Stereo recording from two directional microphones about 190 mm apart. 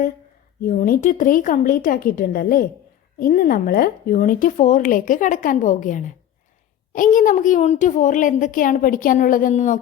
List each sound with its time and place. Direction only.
0.6 s a woman's voice: 45° left (ahead or behind)